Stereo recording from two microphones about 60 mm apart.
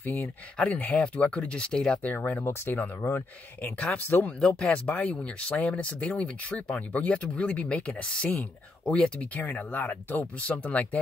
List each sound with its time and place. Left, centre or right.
0.7 s speech: left
2.0 s speech: left
2.4 s speech: left
3.9 s speech: left
4.4 s speech: centre
4.8 s speech: left
10.4 s speech: left